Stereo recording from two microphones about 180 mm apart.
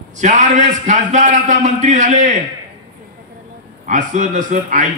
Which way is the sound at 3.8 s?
45° right (ahead or behind).